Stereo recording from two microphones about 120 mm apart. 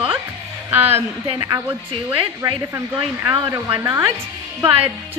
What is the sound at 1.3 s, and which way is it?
Speech, 30° right (ahead or behind).